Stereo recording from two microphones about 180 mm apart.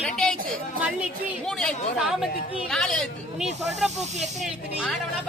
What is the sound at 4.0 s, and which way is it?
Speech, 40° right (ahead or behind).